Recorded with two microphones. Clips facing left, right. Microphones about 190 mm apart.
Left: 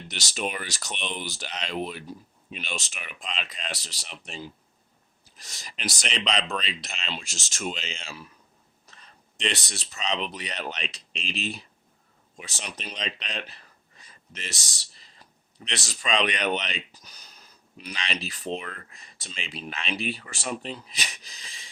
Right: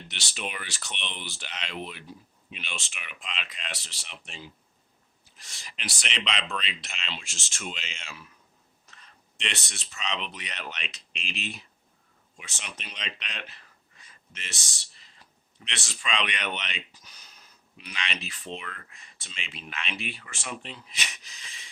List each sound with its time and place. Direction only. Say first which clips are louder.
0.1 s speech: left 6 dB; 40° left (ahead or behind)